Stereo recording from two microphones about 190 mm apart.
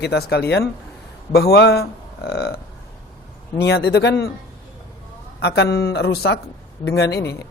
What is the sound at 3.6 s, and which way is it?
Speech, 60° left (ahead or behind).